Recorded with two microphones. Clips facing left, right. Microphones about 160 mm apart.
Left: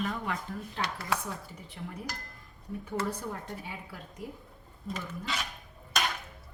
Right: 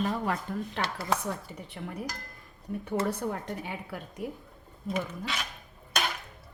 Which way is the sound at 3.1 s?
70° right (ahead or behind).